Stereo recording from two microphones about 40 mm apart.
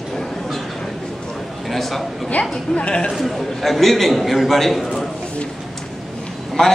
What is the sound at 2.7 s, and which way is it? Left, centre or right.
Speech, left.